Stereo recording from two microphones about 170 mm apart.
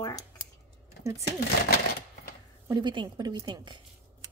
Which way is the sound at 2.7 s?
25° right (ahead or behind).